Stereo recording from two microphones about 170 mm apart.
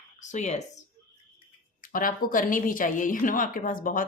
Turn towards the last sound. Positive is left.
turn(degrees=55)  # may be behind; listen again after turning